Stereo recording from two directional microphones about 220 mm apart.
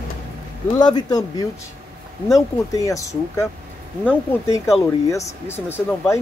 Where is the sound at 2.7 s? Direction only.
15° left (ahead or behind).